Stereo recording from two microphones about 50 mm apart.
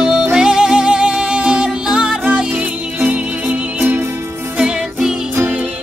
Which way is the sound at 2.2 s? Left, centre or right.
Right.